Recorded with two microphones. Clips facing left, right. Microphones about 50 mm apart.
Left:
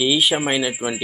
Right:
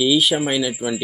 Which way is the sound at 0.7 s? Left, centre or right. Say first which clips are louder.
Right 1 dB; left.